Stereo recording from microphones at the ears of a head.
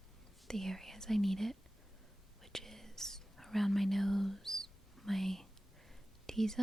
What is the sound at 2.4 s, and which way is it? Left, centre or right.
Whispering, centre.